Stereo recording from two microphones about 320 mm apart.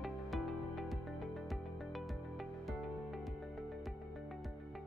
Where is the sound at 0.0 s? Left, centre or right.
Centre.